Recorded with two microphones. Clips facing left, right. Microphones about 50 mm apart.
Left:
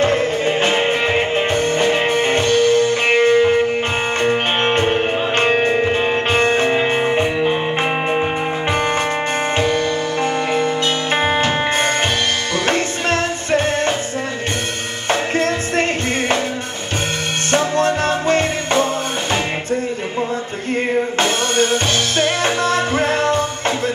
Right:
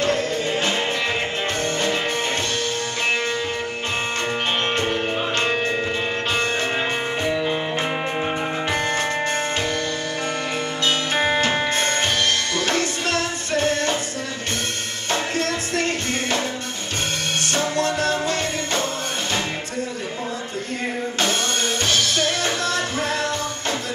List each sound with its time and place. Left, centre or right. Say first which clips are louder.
0.0 s music: left 5 dB; left
9.6 s music: left 7 dB; left
11.1 s music: left 3 dB; left
15.0 s music: left 6 dB; left
17.5 s music: left 7 dB; left
22.1 s music: left 5 dB; left